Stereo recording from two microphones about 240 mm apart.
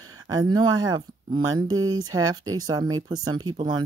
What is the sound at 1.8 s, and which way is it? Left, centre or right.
Speech, right.